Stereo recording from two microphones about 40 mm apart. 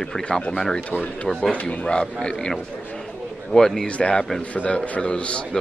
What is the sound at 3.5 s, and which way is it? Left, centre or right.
Speech, centre.